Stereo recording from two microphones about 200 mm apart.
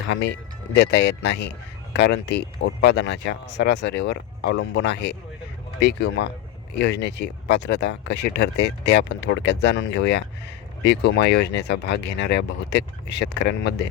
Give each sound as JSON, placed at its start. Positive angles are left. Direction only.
{"t": 0.1, "sound": "speech", "side_deg": 60}